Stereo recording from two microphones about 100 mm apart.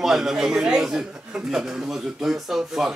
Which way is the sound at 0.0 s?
5° right (ahead or behind).